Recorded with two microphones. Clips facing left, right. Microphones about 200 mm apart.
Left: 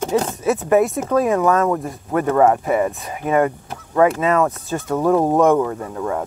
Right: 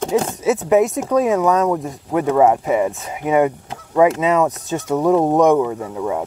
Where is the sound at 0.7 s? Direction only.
20° right (ahead or behind).